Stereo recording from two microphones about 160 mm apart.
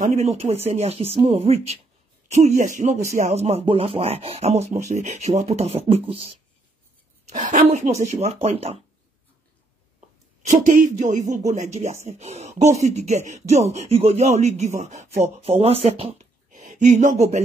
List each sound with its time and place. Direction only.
0.0 s speech: 45° right (ahead or behind)
7.2 s speech: 50° right (ahead or behind)
9.9 s speech: 45° right (ahead or behind)
16.4 s a sound: 55° right (ahead or behind)